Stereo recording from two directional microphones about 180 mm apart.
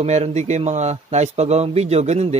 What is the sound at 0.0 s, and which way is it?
Speech, 40° right (ahead or behind).